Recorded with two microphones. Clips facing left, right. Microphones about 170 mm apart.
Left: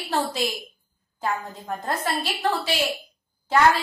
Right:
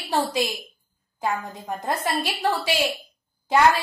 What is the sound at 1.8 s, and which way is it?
Speech, 15° right (ahead or behind).